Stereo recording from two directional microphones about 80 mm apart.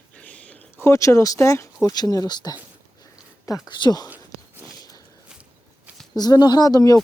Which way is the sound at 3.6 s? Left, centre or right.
Left.